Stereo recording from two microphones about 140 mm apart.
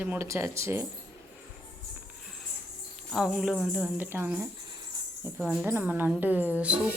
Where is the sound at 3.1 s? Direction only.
5° right (ahead or behind).